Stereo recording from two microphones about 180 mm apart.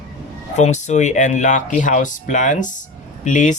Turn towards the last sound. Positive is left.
turn(degrees=45)  # may be behind; listen again after turning